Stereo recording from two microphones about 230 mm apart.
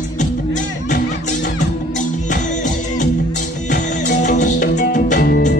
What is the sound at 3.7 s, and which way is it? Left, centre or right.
Music, left.